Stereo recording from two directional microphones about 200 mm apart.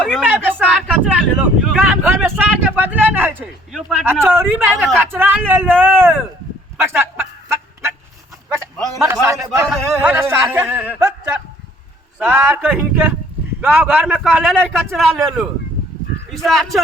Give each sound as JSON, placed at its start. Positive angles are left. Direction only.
{"t": 0.0, "sound": "speech", "side_deg": 0}
{"t": 4.0, "sound": "speech", "side_deg": -10}
{"t": 6.8, "sound": "a sound", "side_deg": -10}
{"t": 8.7, "sound": "a sound", "side_deg": 0}
{"t": 9.2, "sound": "a man's voice", "side_deg": -15}
{"t": 16.5, "sound": "a man's voice", "side_deg": 0}